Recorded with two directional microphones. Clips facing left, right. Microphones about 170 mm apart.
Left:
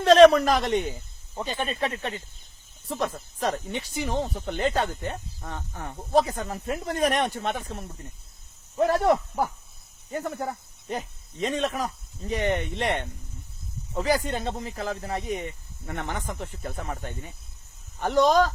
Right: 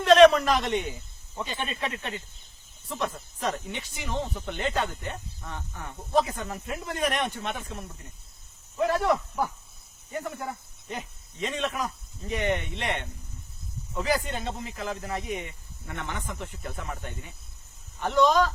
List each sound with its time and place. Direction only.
0.0 s speech: 35° left (ahead or behind)